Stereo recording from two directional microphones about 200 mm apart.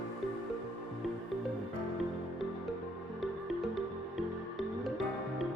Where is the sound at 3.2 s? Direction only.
Centre (ahead or behind).